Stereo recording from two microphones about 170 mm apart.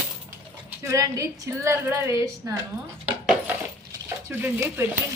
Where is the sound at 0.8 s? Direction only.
20° right (ahead or behind).